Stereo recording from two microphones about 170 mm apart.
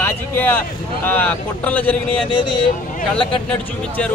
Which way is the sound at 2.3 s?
30° left (ahead or behind).